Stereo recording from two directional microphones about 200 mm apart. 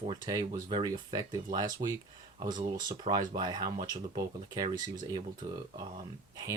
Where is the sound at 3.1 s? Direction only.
20° right (ahead or behind).